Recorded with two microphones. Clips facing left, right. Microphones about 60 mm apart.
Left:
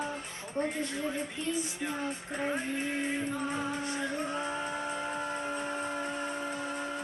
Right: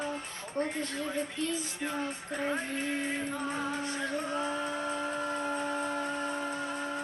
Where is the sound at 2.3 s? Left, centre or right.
Centre.